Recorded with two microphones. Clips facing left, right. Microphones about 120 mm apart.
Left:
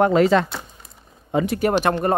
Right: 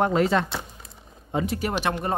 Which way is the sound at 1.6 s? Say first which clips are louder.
Left 7 dB; 50° left (ahead or behind).